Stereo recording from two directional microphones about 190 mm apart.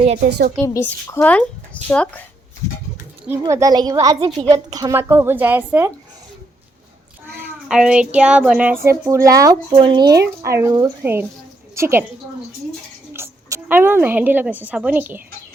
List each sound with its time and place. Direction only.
0.3 s a woman's voice: 60° right (ahead or behind)
0.6 s speech: 15° left (ahead or behind)
3.4 s a child's voice: 20° right (ahead or behind)
7.7 s a woman's voice: 5° right (ahead or behind)
13.1 s a woman's voice: 15° right (ahead or behind)